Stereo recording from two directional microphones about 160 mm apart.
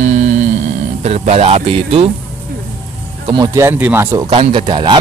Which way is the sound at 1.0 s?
45° right (ahead or behind).